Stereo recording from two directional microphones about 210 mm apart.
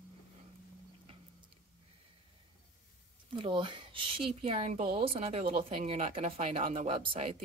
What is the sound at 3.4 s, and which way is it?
Speech, 25° right (ahead or behind).